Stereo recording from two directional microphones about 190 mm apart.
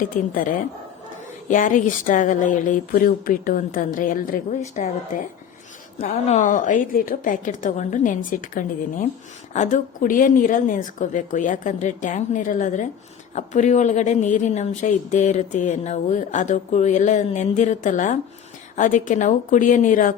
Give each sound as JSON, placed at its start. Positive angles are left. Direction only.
{"t": 0.0, "sound": "a woman's voice", "side_deg": 45}